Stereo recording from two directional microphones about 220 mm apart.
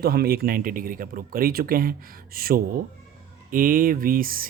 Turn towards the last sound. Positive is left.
turn(degrees=-40)  # may be behind; listen again after turning